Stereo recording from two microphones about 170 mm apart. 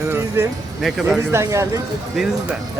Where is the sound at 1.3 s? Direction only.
15° right (ahead or behind).